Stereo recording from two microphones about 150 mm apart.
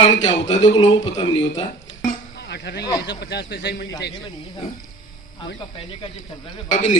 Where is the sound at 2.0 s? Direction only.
75° left (ahead or behind).